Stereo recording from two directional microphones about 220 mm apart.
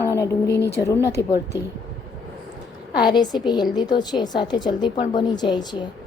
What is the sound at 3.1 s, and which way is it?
A woman's voice, 20° left (ahead or behind).